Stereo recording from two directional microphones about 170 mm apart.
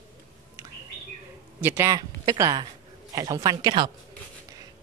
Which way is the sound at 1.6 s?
15° right (ahead or behind).